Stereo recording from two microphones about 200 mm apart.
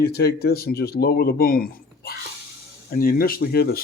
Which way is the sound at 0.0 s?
55° left (ahead or behind).